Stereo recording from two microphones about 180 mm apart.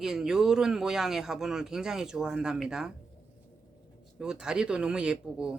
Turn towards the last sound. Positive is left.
turn(degrees=-5)  # may be behind; listen again after turning